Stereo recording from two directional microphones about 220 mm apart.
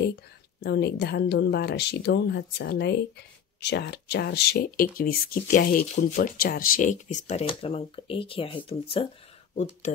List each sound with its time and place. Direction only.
0.6 s speech: 50° left (ahead or behind); by 9.0 s 25° left (ahead or behind)